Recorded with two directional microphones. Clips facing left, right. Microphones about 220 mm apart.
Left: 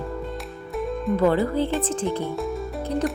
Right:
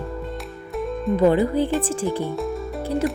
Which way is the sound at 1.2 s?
15° right (ahead or behind).